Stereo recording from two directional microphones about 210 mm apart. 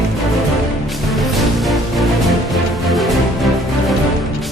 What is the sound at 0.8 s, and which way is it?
Music, centre (ahead or behind).